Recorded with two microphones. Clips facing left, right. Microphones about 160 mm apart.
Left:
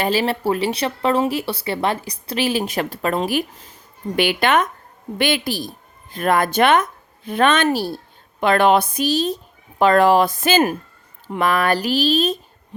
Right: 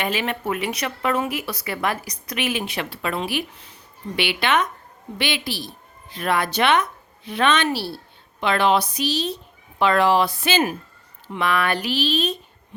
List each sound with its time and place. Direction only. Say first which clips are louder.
0.0 s a woman's voice: left 5 dB; 35° left (ahead or behind)